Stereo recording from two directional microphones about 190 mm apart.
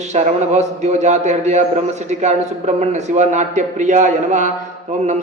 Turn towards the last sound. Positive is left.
turn(degrees=-40)  # may be behind; listen again after turning